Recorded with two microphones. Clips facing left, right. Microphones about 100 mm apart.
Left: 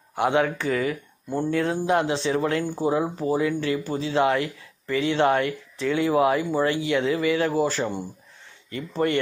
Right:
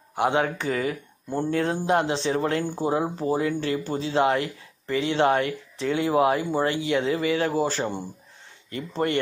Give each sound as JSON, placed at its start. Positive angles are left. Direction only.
{"t": 0.1, "sound": "speech", "side_deg": -25}